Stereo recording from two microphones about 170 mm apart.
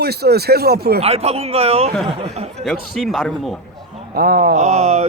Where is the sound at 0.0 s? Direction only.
70° right (ahead or behind).